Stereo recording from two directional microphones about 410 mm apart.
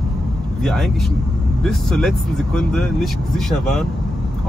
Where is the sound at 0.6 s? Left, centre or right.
Centre.